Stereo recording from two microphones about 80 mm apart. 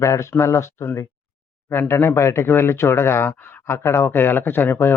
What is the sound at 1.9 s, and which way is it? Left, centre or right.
Speech, left.